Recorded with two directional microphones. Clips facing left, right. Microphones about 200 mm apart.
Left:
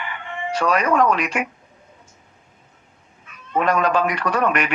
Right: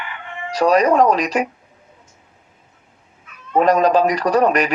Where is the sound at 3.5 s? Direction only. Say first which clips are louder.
Right 5 dB; 35° right (ahead or behind).